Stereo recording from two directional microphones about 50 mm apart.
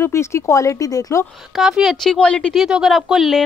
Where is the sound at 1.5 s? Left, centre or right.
Centre.